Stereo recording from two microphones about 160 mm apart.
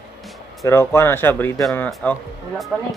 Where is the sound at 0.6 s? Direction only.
15° left (ahead or behind).